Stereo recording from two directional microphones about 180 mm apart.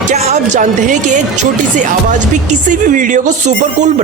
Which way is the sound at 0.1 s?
40° right (ahead or behind).